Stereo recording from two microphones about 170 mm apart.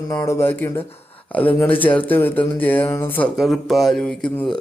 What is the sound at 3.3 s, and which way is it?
Speech, centre (ahead or behind).